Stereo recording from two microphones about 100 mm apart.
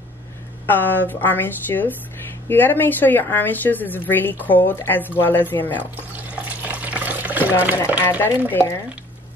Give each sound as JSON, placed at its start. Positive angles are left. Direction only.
{"t": 0.7, "sound": "a woman's voice", "side_deg": 20}
{"t": 6.1, "sound": "water", "side_deg": -15}
{"t": 8.0, "sound": "a woman's voice", "side_deg": 20}